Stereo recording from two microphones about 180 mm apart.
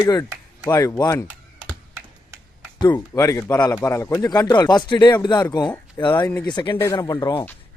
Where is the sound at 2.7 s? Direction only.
20° left (ahead or behind).